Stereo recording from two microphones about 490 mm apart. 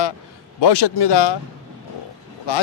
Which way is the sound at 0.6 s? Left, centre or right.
Left.